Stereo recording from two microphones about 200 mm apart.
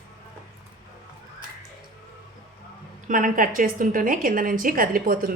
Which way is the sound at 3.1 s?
45° right (ahead or behind).